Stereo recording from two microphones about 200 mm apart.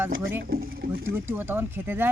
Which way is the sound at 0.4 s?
50° right (ahead or behind).